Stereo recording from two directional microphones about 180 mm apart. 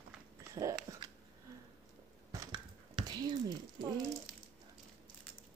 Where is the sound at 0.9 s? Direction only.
15° right (ahead or behind).